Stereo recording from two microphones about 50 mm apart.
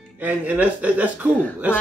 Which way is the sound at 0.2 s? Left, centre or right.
Right.